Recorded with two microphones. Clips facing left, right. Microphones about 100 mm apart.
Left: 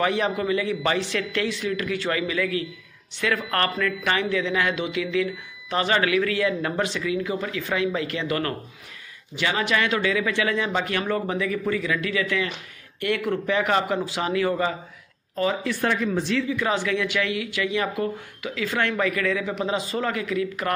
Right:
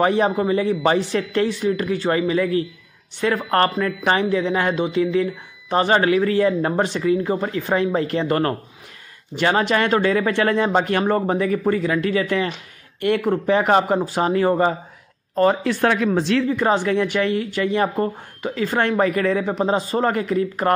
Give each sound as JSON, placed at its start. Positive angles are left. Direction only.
{"t": 0.0, "sound": "a man's voice", "side_deg": -35}
{"t": 15.3, "sound": "speech", "side_deg": -50}
{"t": 16.4, "sound": "a man's voice", "side_deg": -45}